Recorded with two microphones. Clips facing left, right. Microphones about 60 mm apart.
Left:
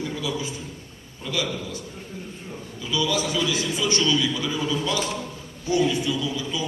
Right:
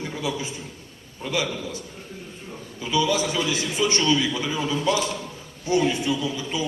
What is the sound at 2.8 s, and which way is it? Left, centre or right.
A man's voice, right.